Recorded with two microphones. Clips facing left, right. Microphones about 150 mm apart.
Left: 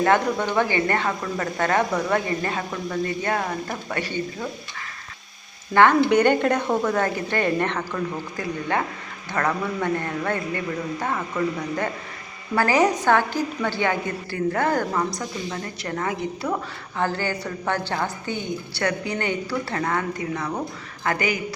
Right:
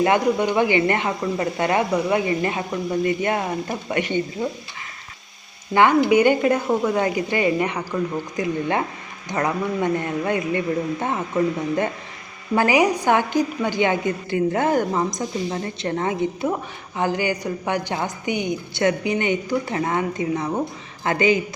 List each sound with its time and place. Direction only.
0.0 s speech: 15° right (ahead or behind)
5.7 s a woman's voice: 15° right (ahead or behind)